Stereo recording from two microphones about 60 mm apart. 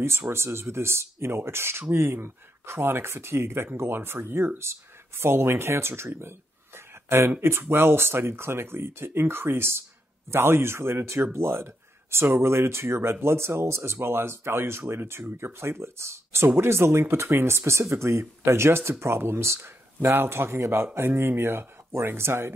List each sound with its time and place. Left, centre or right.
0.3 s speech: right